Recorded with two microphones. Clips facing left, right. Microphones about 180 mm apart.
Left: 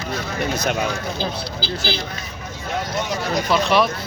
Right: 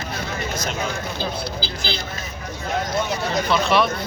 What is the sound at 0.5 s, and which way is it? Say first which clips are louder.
Speech: left 6 dB; 60° left (ahead or behind).